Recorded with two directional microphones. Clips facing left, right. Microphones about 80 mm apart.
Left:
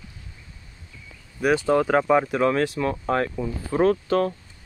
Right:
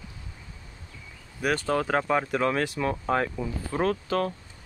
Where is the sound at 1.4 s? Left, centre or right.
Centre.